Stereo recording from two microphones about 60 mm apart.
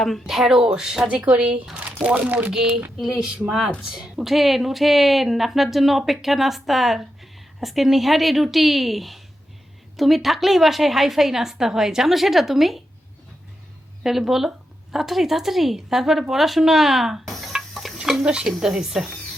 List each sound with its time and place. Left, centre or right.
0.0 s a woman's voice: centre
1.0 s speech: right
2.5 s a woman's voice: centre
14.0 s a woman's voice: centre
17.6 s a sound: centre
17.9 s a woman's voice: centre